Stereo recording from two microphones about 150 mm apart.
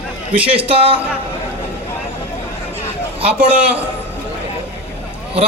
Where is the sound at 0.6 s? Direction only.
35° right (ahead or behind).